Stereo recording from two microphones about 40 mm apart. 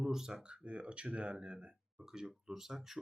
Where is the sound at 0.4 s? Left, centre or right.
Right.